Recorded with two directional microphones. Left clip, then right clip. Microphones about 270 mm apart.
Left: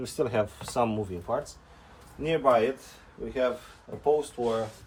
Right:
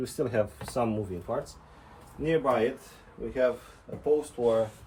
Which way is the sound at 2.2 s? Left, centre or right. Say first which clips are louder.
Even; centre.